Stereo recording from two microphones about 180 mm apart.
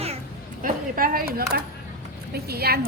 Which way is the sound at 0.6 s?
50° right (ahead or behind).